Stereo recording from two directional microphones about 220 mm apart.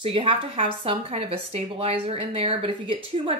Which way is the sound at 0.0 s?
25° right (ahead or behind).